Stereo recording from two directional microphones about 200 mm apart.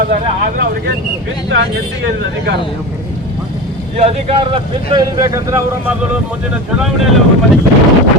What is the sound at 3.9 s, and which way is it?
Speech, 30° right (ahead or behind).